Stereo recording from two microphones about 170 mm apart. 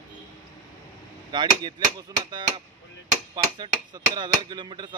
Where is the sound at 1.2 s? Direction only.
25° right (ahead or behind).